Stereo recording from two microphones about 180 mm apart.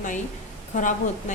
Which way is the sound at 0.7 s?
45° left (ahead or behind).